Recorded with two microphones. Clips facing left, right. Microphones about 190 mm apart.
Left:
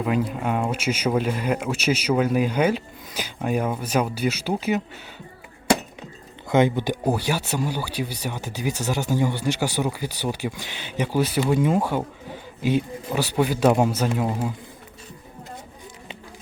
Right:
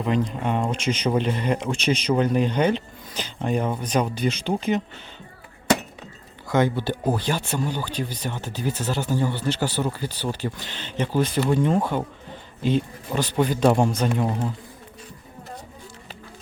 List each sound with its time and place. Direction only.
0.0 s speech: 5° left (ahead or behind)
6.5 s speech: 20° left (ahead or behind)